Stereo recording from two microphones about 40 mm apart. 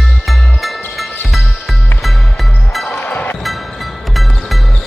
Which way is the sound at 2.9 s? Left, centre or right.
Left.